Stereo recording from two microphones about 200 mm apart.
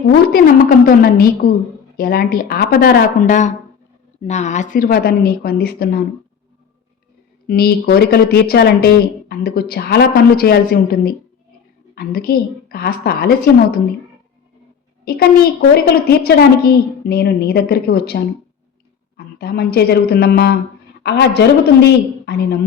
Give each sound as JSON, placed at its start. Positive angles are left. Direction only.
{"t": 0.1, "sound": "a woman's voice", "side_deg": 45}
{"t": 7.4, "sound": "a woman's voice", "side_deg": 50}
{"t": 15.0, "sound": "a child's voice", "side_deg": 50}